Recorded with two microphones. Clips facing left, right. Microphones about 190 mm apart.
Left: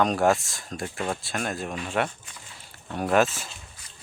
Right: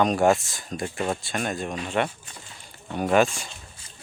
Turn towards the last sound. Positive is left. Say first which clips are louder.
# right 2 dB
turn(degrees=-25)  # may be behind; listen again after turning